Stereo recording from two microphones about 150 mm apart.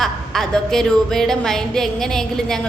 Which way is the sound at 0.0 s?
Centre (ahead or behind).